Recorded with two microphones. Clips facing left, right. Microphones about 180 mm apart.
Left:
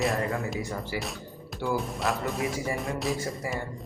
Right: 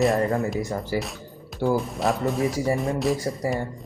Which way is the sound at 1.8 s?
Centre (ahead or behind).